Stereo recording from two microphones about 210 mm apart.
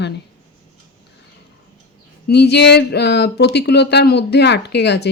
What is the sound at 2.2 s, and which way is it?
Speech, 50° left (ahead or behind).